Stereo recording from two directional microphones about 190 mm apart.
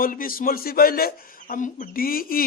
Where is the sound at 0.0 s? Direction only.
50° left (ahead or behind).